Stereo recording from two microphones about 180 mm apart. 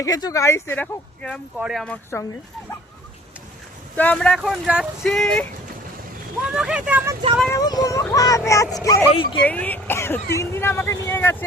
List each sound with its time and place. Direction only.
0.0 s speech: 20° left (ahead or behind)
1.5 s speech: 5° right (ahead or behind)
3.9 s speech: 5° left (ahead or behind)
4.4 s speech: 5° right (ahead or behind)
7.5 s speech: 20° left (ahead or behind)
9.4 s speech: 10° left (ahead or behind)